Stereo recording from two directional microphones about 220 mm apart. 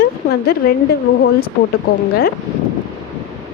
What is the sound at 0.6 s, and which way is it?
Speech, 45° left (ahead or behind).